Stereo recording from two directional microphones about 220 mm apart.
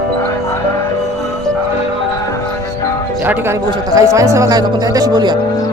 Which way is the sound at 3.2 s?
10° right (ahead or behind).